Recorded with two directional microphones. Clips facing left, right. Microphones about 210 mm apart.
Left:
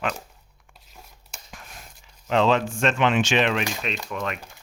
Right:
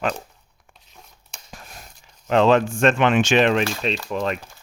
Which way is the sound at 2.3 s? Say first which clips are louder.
Right 4 dB; 50° right (ahead or behind).